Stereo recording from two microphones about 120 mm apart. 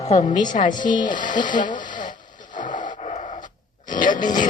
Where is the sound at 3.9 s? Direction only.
90° left.